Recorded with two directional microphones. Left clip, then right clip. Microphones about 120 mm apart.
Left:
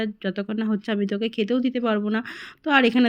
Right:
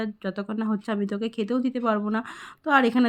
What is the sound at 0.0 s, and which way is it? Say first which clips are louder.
Speech: left 3 dB; 10° left (ahead or behind).